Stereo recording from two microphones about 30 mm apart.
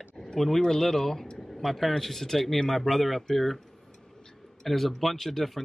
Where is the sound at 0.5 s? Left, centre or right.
Centre.